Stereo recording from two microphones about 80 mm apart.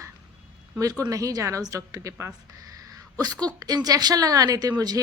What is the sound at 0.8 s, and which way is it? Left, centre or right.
Speech, right.